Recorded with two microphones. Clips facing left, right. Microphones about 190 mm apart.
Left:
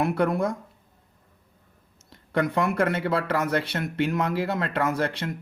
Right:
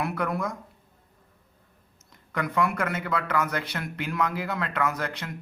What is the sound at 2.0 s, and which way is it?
Speech, 30° left (ahead or behind).